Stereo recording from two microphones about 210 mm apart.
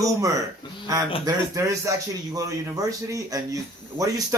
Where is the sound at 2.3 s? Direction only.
15° right (ahead or behind).